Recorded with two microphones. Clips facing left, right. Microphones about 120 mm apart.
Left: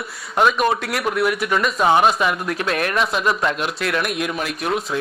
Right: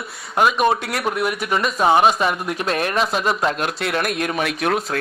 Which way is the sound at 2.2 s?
25° right (ahead or behind).